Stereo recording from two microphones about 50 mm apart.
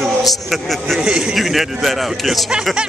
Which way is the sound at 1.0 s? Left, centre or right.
Centre.